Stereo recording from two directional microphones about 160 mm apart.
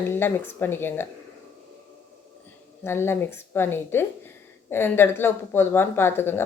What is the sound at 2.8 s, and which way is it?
Speech, 15° left (ahead or behind).